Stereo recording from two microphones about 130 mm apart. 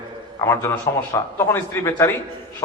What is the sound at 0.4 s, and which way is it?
A man's voice, 20° left (ahead or behind).